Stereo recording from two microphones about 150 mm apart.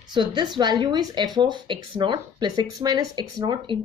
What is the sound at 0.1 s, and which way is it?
Speech, 30° right (ahead or behind).